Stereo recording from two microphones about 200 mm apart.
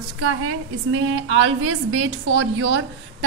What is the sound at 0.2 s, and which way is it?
A woman's voice, 90° right.